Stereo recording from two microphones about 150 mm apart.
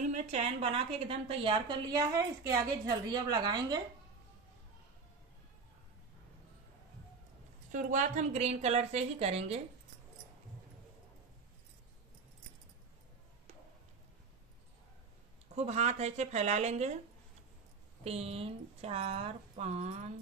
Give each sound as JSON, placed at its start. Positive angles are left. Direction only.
{"t": 0.0, "sound": "a woman's voice", "side_deg": -45}
{"t": 7.7, "sound": "a woman's voice", "side_deg": -60}
{"t": 15.5, "sound": "a woman's voice", "side_deg": -50}
{"t": 18.0, "sound": "a woman's voice", "side_deg": -40}